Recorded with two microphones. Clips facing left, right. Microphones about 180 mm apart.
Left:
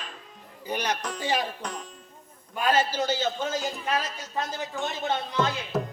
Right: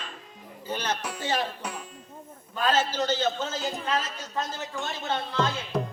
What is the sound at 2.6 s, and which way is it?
A man's voice, 10° left (ahead or behind).